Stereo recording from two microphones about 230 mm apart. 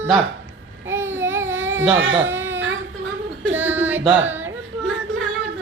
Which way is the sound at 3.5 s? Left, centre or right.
Centre.